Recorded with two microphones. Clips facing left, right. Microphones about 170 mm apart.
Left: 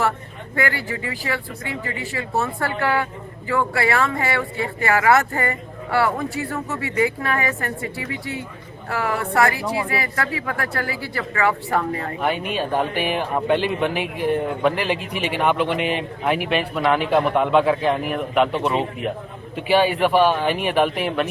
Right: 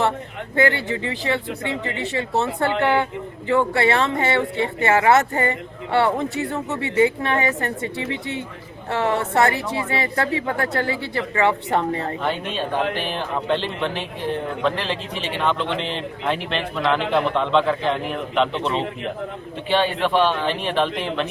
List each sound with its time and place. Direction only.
0.5 s speech: 25° right (ahead or behind)
12.2 s speech: 10° left (ahead or behind)